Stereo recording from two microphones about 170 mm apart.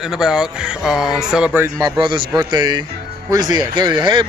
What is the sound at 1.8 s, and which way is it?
Speech, 25° right (ahead or behind).